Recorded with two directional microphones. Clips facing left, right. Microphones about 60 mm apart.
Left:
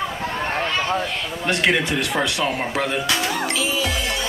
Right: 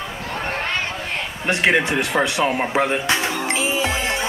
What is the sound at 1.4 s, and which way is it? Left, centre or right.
Music, right.